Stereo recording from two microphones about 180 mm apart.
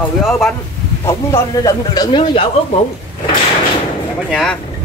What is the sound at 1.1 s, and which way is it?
Speech, 20° left (ahead or behind).